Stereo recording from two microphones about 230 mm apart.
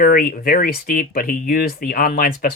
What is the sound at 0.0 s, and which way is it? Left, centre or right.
Speech, left.